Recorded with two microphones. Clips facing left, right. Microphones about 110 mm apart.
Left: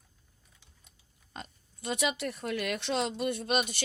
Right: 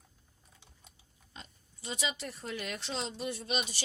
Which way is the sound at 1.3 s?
55° left (ahead or behind).